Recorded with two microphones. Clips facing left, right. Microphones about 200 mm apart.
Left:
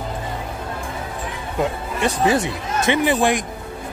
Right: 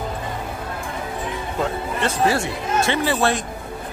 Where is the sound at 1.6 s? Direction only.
15° left (ahead or behind).